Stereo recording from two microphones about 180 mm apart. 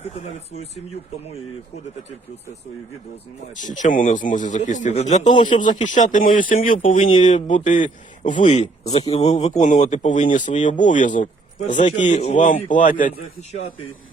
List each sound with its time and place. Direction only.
3.6 s speech: 45° left (ahead or behind)
5.3 s a man's voice: 25° left (ahead or behind)
5.5 s speech: 45° left (ahead or behind)